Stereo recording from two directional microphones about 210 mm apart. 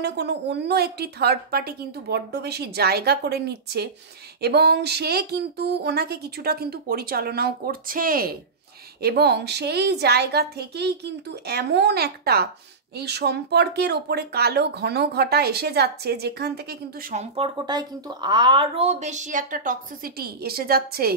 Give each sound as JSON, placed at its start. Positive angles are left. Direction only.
{"t": 0.0, "sound": "speech", "side_deg": -55}
{"t": 17.1, "sound": "speech", "side_deg": -30}